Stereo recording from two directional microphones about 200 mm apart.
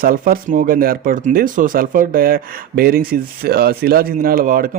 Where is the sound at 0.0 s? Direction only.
45° right (ahead or behind).